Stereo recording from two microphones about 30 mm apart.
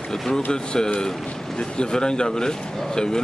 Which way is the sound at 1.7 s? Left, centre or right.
Left.